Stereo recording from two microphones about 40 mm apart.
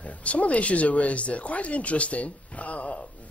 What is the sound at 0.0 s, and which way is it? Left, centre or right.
Speech, left.